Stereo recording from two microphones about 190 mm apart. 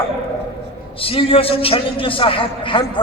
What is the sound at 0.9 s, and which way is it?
A man's voice, 30° left (ahead or behind).